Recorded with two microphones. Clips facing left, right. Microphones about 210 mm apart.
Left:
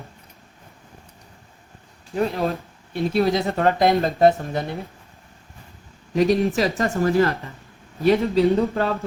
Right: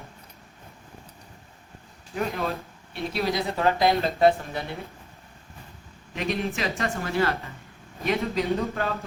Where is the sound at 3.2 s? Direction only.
50° left (ahead or behind).